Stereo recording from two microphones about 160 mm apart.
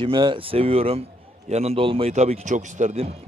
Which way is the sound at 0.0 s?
30° right (ahead or behind).